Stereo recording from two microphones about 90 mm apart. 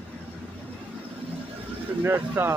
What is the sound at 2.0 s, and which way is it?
Speech, 25° right (ahead or behind).